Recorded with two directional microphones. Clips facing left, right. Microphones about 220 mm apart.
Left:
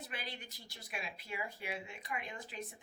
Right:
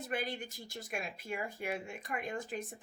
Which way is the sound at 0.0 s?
50° right (ahead or behind).